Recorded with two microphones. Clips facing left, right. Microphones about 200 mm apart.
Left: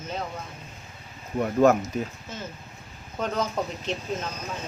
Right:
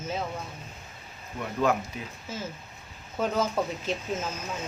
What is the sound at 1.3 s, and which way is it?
Speech, 45° left (ahead or behind).